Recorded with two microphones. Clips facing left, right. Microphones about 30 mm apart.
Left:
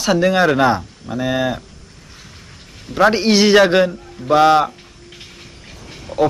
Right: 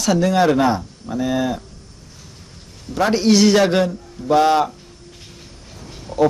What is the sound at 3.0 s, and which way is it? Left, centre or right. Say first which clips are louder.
A man's voice: left 2 dB; left.